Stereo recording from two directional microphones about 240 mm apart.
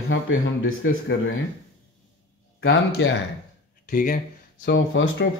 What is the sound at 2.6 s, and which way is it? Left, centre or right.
Speech, left.